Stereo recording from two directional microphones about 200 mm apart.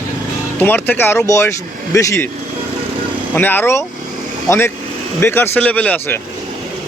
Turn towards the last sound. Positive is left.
turn(degrees=10)  # may be behind; listen again after turning